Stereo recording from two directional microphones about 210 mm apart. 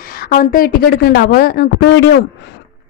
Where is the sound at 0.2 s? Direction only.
45° left (ahead or behind).